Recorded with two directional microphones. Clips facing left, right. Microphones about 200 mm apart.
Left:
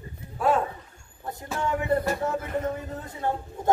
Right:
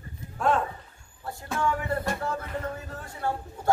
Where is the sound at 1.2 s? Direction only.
20° left (ahead or behind).